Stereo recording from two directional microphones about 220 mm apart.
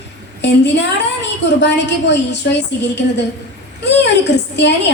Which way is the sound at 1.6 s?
50° left (ahead or behind).